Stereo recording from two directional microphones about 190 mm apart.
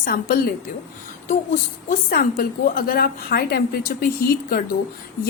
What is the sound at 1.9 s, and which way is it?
A woman's voice, 45° left (ahead or behind).